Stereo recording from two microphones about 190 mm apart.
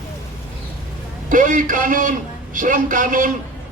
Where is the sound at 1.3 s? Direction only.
45° right (ahead or behind).